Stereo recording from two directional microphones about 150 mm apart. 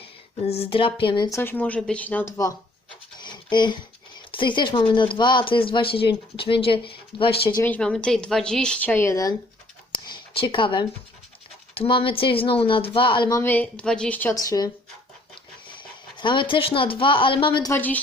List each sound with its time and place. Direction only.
0.4 s speech: 40° left (ahead or behind)
1.3 s a woman's voice: 15° left (ahead or behind)
3.2 s writing: 30° left (ahead or behind)
4.3 s speech: 35° left (ahead or behind)
7.6 s speech: 10° left (ahead or behind)
9.9 s a sound: 35° left (ahead or behind)
11.7 s speech: 35° left (ahead or behind)
13.4 s a woman's voice: 10° left (ahead or behind)
14.3 s speech: 25° left (ahead or behind)
16.2 s speech: 30° left (ahead or behind)
17.7 s a woman's voice: 10° left (ahead or behind)